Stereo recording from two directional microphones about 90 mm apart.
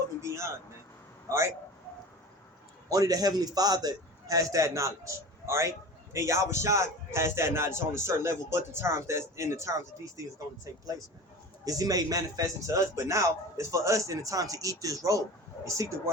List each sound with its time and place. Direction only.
0.2 s a man's voice: 30° right (ahead or behind)
2.9 s a man's voice: 40° right (ahead or behind)
11.6 s a man's voice: 40° right (ahead or behind)